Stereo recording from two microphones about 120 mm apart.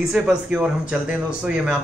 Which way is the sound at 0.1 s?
5° right (ahead or behind).